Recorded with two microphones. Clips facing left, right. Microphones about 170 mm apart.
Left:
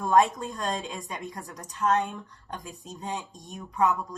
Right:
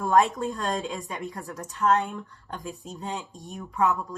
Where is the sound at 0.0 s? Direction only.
20° left (ahead or behind).